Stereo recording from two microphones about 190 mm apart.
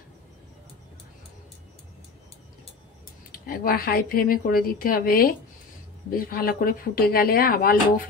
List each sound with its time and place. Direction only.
3.3 s speech: 50° left (ahead or behind)